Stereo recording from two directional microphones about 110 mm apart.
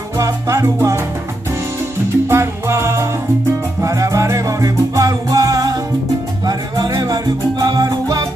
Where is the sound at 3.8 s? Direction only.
30° right (ahead or behind).